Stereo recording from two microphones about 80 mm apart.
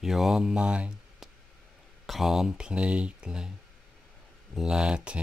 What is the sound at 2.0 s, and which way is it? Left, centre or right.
Speech, centre.